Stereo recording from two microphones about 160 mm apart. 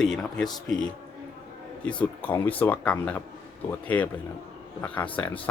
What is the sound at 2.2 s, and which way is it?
Speech, 10° left (ahead or behind).